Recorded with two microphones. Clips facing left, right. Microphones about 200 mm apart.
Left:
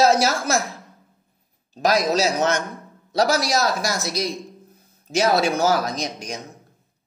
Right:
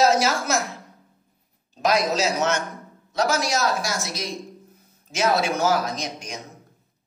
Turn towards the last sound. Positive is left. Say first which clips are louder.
# left 3 dB
turn(degrees=35)  # may be behind; listen again after turning